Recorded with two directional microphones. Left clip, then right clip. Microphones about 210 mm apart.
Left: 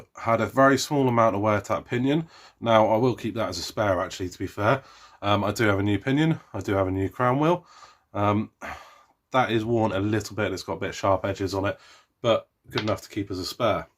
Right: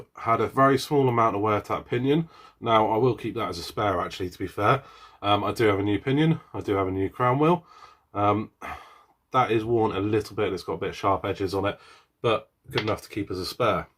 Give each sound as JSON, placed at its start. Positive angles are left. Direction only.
{"t": 0.2, "sound": "speech", "side_deg": 45}
{"t": 12.8, "sound": "speech", "side_deg": 35}